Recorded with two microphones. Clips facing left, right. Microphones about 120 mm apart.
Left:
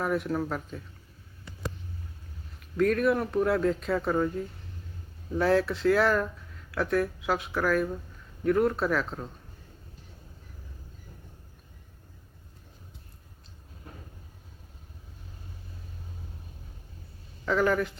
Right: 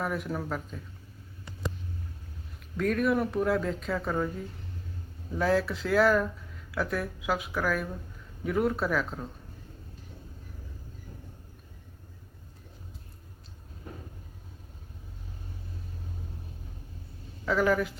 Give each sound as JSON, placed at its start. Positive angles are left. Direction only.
{"t": 0.0, "sound": "speech", "side_deg": 0}
{"t": 2.6, "sound": "speech", "side_deg": 0}
{"t": 17.4, "sound": "a woman's voice", "side_deg": 0}